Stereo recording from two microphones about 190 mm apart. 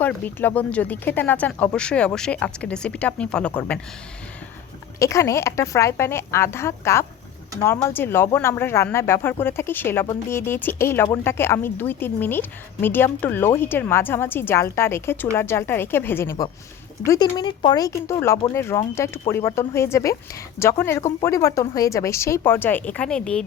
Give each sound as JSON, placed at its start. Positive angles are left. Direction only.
{"t": 0.0, "sound": "speech", "side_deg": 10}
{"t": 4.9, "sound": "speech", "side_deg": 15}